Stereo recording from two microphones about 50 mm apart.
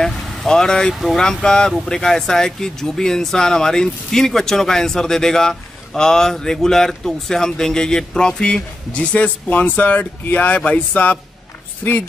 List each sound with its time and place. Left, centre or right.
0.0 s a woman's voice: centre; by 12.0 s left